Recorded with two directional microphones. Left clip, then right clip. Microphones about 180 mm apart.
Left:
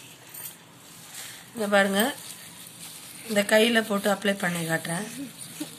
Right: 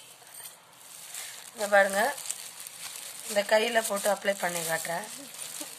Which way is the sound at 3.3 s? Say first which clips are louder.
Left 4 dB; 20° right (ahead or behind).